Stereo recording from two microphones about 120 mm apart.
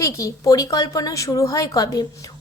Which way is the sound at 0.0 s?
25° left (ahead or behind).